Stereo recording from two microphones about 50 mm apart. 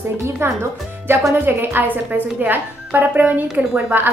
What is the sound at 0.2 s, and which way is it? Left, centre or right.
A woman's voice, right.